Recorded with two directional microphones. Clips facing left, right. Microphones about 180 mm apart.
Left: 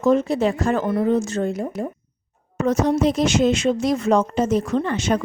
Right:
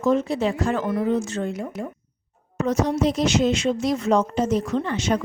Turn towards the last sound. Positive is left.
turn(degrees=50)  # may be behind; listen again after turning